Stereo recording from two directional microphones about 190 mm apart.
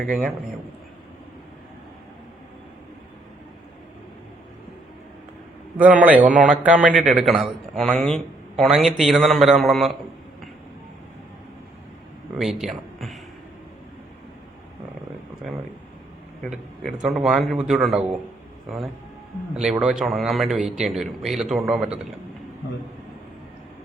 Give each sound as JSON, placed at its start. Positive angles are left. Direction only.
{"t": 0.0, "sound": "a man's voice", "side_deg": -45}
{"t": 5.7, "sound": "a man's voice", "side_deg": -10}
{"t": 12.4, "sound": "a man's voice", "side_deg": 0}
{"t": 16.4, "sound": "a man's voice", "side_deg": 0}